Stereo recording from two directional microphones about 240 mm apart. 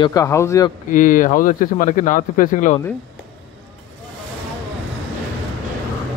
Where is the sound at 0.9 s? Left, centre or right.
Left.